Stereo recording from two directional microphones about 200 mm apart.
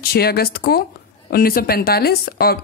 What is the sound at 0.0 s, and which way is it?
Speech, 50° left (ahead or behind).